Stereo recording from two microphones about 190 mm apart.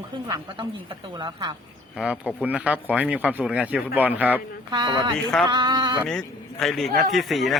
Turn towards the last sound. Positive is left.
turn(degrees=0)  # may be behind; listen again after turning